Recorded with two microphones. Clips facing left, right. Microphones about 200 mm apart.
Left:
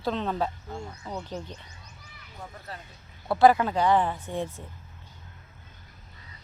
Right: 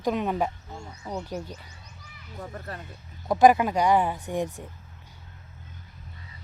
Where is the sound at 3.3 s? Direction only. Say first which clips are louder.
Right 1 dB; 15° right (ahead or behind).